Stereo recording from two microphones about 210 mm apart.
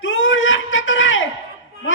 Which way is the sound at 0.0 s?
65° left (ahead or behind).